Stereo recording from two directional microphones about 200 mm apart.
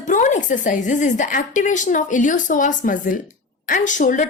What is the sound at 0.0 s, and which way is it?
Speech, 40° left (ahead or behind).